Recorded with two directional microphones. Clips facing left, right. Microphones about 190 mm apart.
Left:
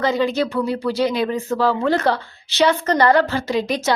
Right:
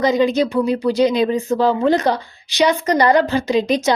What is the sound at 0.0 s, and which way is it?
Speech, 15° right (ahead or behind).